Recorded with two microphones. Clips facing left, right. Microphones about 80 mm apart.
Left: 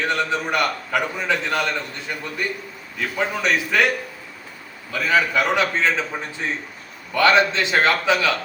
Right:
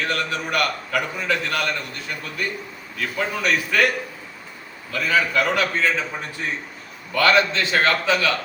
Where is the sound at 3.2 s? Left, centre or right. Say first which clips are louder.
Left 1 dB; centre.